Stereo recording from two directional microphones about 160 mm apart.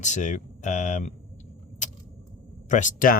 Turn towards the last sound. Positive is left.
turn(degrees=55)  # may be behind; listen again after turning